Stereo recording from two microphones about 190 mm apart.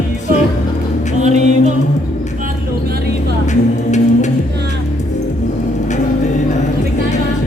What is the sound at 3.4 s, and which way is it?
Music, 40° left (ahead or behind).